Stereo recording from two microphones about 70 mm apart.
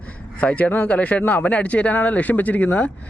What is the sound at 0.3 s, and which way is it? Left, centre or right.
Speech, left.